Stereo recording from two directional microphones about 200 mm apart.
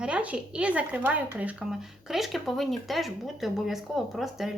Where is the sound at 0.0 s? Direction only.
5° right (ahead or behind).